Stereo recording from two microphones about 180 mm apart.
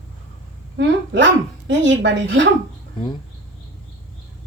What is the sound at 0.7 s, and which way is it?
Speech, 90° right.